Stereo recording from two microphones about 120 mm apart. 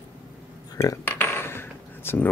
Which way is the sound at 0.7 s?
25° left (ahead or behind).